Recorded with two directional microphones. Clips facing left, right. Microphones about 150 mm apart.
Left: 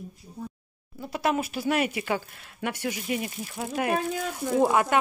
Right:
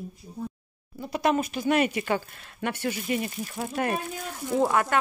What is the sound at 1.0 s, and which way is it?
Speech, 5° left (ahead or behind).